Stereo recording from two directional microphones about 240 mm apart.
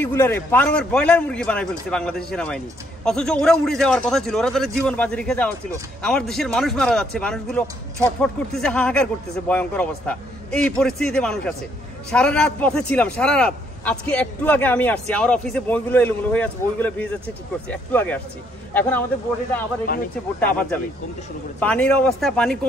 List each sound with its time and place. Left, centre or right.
0.0 s a man's voice: centre
21.5 s a man's voice: centre